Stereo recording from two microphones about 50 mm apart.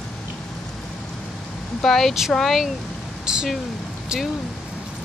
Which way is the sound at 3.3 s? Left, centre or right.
Centre.